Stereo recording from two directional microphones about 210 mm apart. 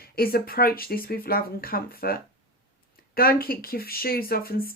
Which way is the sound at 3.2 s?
45° left (ahead or behind).